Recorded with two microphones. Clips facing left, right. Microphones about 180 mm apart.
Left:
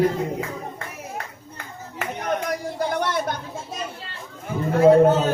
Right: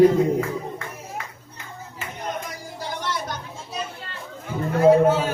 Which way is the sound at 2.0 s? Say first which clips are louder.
Left 6 dB; 70° left (ahead or behind).